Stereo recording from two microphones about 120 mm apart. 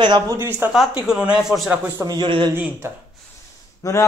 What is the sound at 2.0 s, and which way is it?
Speech, 35° right (ahead or behind).